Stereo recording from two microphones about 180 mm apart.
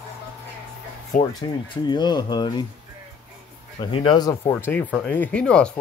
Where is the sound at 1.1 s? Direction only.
45° left (ahead or behind).